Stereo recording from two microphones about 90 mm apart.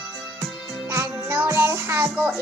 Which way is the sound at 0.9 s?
30° right (ahead or behind).